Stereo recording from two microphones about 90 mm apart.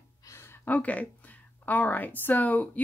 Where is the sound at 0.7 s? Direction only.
15° left (ahead or behind).